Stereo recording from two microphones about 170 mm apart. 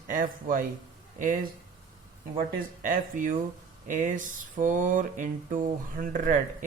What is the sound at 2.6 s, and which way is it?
Speech, 50° right (ahead or behind).